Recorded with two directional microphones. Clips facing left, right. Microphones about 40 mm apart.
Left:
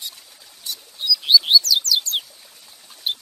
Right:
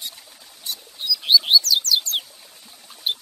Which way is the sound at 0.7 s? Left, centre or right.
Right.